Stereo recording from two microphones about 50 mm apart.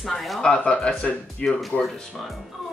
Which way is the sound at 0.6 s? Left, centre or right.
Left.